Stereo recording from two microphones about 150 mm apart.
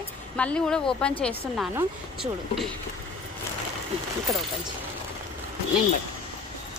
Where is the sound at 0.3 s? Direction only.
5° left (ahead or behind).